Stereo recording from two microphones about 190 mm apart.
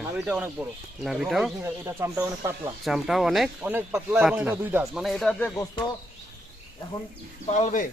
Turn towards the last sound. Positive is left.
turn(degrees=40)  # may be behind; listen again after turning